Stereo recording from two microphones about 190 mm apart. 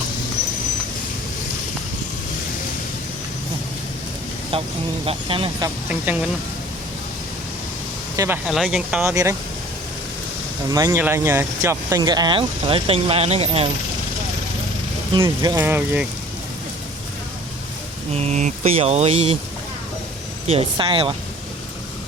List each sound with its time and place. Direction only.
4.5 s speech: 30° right (ahead or behind)
8.1 s speech: 15° right (ahead or behind)
8.4 s speech: centre (ahead or behind)
10.7 s speech: 20° right (ahead or behind)
15.2 s speech: 20° right (ahead or behind)
18.1 s speech: 35° right (ahead or behind)
20.5 s speech: 30° right (ahead or behind)